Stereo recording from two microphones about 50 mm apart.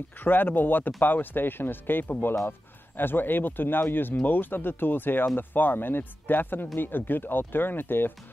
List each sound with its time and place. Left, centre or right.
0.2 s speech: left